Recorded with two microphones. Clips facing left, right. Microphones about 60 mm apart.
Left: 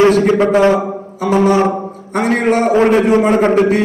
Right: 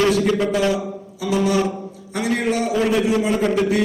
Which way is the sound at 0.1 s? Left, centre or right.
Left.